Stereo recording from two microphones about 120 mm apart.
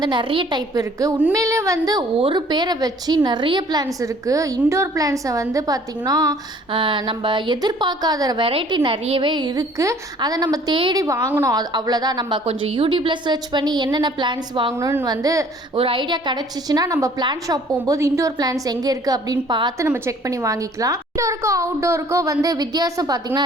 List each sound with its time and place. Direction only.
0.0 s a woman's voice: 40° right (ahead or behind)
0.7 s a woman's voice: 30° right (ahead or behind)
2.1 s a woman's voice: 45° right (ahead or behind)
6.7 s a woman's voice: 45° right (ahead or behind)
8.4 s a woman's voice: 45° right (ahead or behind)
12.5 s a woman's voice: 50° right (ahead or behind)
14.8 s a woman's voice: 25° right (ahead or behind)
15.7 s a woman's voice: 50° right (ahead or behind)
19.8 s a woman's voice: 25° right (ahead or behind)